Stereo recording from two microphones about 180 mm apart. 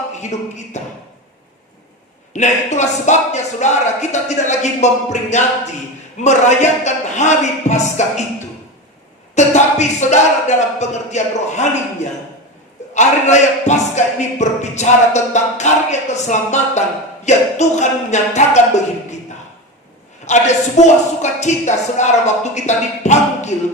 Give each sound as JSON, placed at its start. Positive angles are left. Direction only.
{"t": 0.2, "sound": "speech", "side_deg": 40}
{"t": 2.3, "sound": "speech", "side_deg": 40}
{"t": 9.3, "sound": "speech", "side_deg": 40}
{"t": 20.2, "sound": "speech", "side_deg": 40}